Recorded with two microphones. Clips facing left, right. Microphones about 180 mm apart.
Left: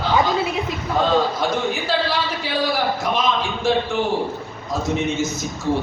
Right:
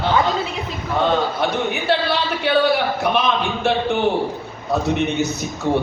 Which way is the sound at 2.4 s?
65° right (ahead or behind).